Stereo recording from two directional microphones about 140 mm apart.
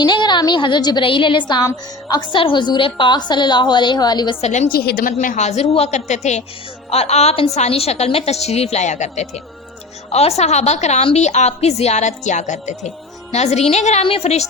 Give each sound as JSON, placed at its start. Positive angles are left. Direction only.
{"t": 0.0, "sound": "a woman's voice", "side_deg": 30}
{"t": 4.4, "sound": "a woman's voice", "side_deg": 50}
{"t": 4.7, "sound": "a woman's voice", "side_deg": 90}
{"t": 5.2, "sound": "a woman's voice", "side_deg": 60}